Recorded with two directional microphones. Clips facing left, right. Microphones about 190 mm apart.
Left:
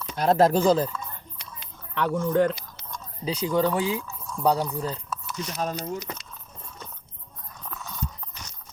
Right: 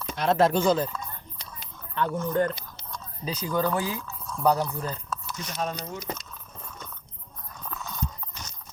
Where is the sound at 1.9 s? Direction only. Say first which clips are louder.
Left 3 dB; 80° left.